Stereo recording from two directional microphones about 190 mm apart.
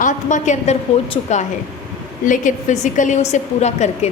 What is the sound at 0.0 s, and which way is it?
A woman's voice, 40° left (ahead or behind).